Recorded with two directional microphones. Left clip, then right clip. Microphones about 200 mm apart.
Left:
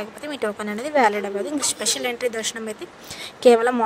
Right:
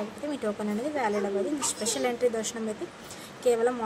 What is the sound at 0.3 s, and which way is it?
Speech, 45° left (ahead or behind).